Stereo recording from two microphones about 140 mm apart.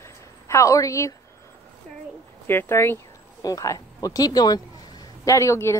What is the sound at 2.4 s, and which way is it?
Speech, 15° left (ahead or behind).